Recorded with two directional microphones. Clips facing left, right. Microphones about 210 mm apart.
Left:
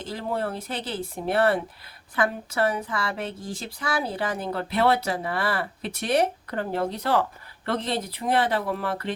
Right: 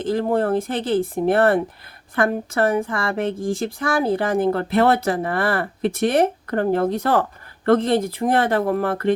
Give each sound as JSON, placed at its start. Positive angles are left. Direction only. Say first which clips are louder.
{"t": 0.0, "sound": "speech", "louder": "right 9 dB", "side_deg": -50}